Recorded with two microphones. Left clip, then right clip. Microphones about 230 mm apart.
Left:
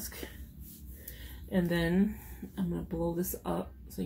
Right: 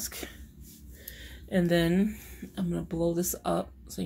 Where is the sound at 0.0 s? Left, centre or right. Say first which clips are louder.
Right 5 dB; right.